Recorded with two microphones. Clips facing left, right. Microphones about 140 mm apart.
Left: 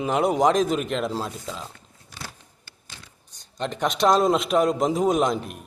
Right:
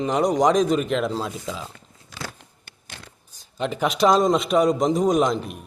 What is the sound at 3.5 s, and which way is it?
Speech, 5° right (ahead or behind).